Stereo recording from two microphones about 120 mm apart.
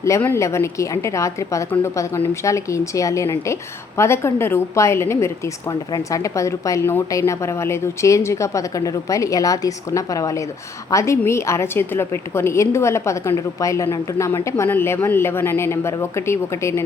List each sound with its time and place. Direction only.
0.0 s a woman's voice: 20° left (ahead or behind)